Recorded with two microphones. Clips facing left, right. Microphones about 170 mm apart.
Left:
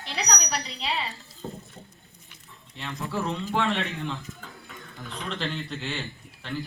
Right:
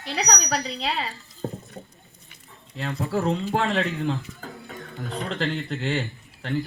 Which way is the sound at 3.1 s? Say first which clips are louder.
Right 5 dB; 40° right (ahead or behind).